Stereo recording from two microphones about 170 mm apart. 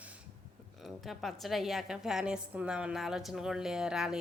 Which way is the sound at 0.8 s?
Centre (ahead or behind).